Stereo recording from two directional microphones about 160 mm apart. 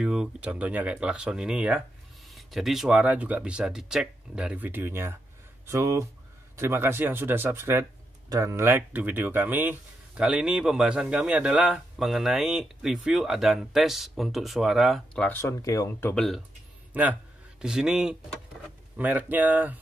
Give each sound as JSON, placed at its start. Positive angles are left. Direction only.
{"t": 0.0, "sound": "speech", "side_deg": -5}
{"t": 15.2, "sound": "speech", "side_deg": 15}
{"t": 16.9, "sound": "a man's voice", "side_deg": -10}